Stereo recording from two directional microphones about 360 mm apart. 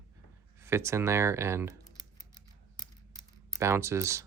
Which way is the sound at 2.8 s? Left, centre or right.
Centre.